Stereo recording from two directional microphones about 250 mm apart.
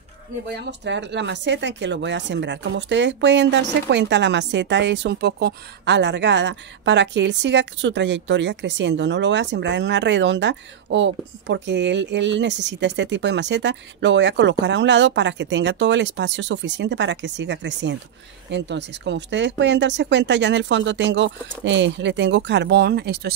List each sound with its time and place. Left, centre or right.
0.7 s speech: right